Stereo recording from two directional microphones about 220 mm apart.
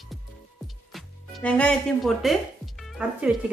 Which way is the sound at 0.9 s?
5° left (ahead or behind).